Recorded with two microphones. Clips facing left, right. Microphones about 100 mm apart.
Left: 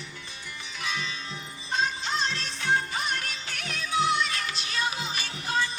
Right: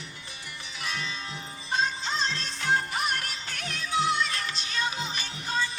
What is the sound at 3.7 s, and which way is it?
Music, centre (ahead or behind).